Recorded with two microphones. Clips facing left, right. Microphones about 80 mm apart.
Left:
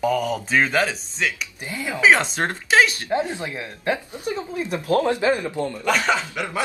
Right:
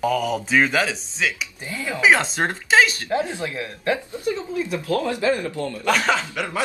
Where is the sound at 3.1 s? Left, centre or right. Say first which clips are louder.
Even; left.